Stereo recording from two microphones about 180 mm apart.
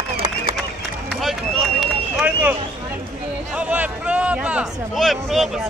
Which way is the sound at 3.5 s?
10° right (ahead or behind).